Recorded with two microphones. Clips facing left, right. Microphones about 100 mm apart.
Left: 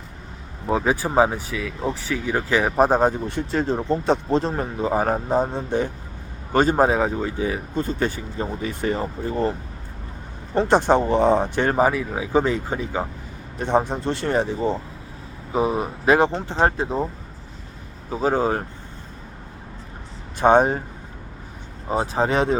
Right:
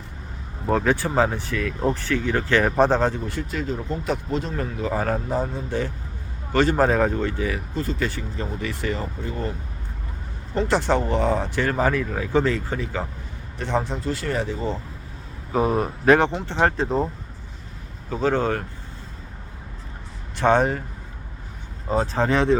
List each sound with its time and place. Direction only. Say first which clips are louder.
0.7 s speech: even; 10° left (ahead or behind)
3.5 s speech: left 8 dB; 30° left (ahead or behind); by 7.3 s 10° left (ahead or behind)
7.3 s speech: left 2 dB; 20° left (ahead or behind)
10.7 s speech: left 4 dB; 20° left (ahead or behind)
18.1 s speech: left 1 dB; 10° left (ahead or behind)
20.4 s speech: left 3 dB; 15° left (ahead or behind)
21.8 s speech: even; 15° left (ahead or behind)